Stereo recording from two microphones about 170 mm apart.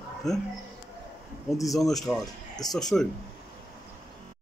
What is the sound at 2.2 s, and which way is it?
Speech, 20° left (ahead or behind).